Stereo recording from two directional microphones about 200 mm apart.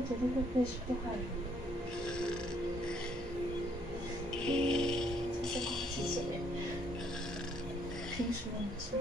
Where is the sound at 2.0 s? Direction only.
5° left (ahead or behind).